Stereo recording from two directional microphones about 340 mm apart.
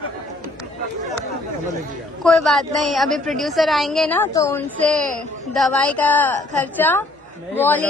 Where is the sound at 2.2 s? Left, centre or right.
Centre.